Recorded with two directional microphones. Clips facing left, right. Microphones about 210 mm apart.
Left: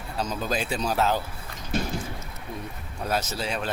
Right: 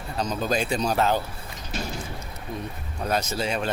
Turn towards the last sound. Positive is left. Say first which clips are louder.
# right 3 dB
turn(degrees=0)  # may be behind; listen again after turning